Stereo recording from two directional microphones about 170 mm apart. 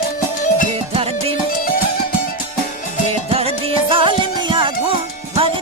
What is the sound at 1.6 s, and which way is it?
Music, 55° left (ahead or behind).